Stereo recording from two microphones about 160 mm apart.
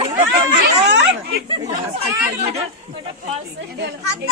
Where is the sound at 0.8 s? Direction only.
90° right.